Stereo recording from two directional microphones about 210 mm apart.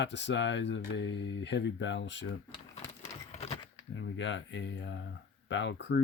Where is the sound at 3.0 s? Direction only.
30° left (ahead or behind).